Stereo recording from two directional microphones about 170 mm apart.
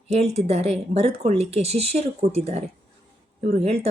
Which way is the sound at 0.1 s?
40° right (ahead or behind).